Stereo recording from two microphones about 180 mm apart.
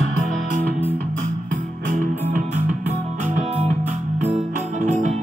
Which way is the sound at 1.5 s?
50° right (ahead or behind).